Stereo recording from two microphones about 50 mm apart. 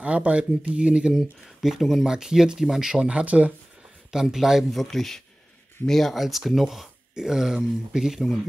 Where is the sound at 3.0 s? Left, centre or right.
Right.